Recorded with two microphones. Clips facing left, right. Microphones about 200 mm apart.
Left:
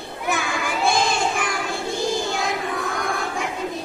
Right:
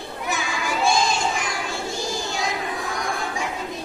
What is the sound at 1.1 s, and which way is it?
Crowd, 55° left (ahead or behind).